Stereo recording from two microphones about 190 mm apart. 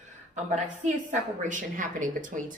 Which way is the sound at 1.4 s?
40° right (ahead or behind).